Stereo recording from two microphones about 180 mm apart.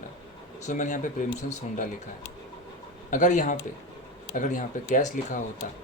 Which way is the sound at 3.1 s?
45° left (ahead or behind).